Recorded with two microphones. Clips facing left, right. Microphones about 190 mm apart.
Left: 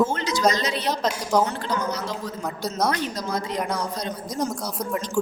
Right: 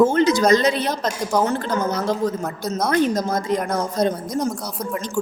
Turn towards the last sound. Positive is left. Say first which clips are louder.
# right 9 dB
turn(degrees=-50)  # may be behind; listen again after turning